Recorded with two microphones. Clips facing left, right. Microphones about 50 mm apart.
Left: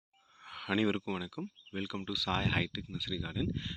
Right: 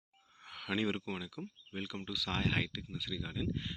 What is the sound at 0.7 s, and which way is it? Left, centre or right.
Speech, centre.